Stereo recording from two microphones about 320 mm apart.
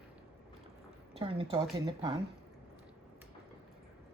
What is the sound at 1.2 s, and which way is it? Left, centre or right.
Speech, centre.